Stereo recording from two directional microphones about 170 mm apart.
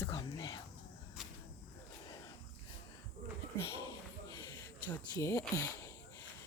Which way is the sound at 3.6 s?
20° left (ahead or behind).